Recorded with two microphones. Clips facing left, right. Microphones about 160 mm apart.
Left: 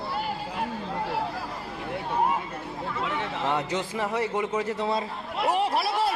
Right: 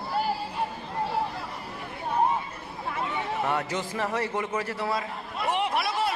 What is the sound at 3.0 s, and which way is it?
Chatter, 90° left.